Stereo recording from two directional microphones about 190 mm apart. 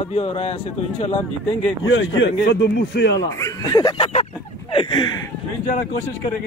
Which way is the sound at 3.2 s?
20° left (ahead or behind).